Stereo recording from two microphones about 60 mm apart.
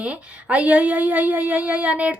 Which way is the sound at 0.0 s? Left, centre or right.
Right.